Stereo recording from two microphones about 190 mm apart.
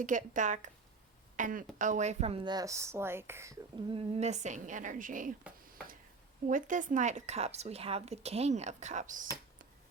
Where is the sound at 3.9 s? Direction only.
30° right (ahead or behind).